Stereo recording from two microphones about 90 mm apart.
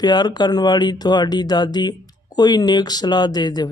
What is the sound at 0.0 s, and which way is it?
Speech, 50° left (ahead or behind).